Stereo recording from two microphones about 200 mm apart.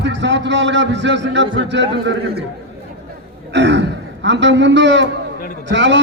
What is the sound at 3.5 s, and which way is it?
A man's voice, 60° right (ahead or behind).